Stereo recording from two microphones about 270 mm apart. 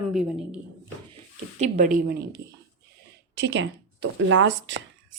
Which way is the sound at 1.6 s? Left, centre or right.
Right.